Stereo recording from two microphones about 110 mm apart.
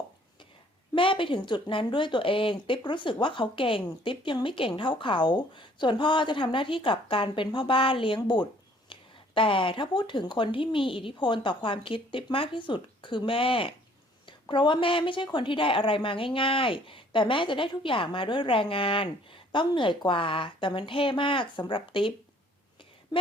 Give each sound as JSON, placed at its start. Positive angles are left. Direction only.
{"t": 0.9, "sound": "speech", "side_deg": 50}